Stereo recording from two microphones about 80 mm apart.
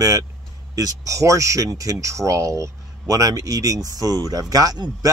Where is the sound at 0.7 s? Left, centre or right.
Right.